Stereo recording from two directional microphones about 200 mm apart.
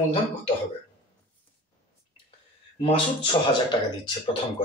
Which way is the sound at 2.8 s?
25° left (ahead or behind).